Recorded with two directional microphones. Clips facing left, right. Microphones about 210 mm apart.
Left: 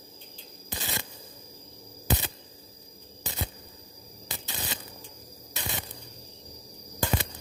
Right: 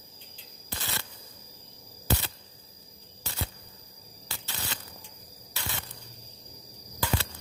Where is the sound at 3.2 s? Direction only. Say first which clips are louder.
Left 2 dB; 15° left (ahead or behind).